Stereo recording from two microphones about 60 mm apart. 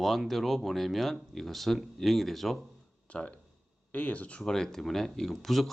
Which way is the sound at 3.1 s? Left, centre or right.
Left.